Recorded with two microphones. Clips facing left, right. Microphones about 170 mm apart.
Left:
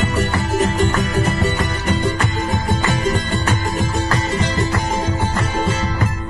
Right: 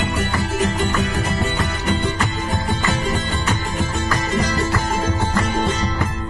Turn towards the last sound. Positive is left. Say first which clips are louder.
# left 1 dB
turn(degrees=20)  # may be behind; listen again after turning